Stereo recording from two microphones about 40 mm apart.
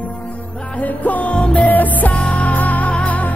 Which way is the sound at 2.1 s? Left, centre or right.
Left.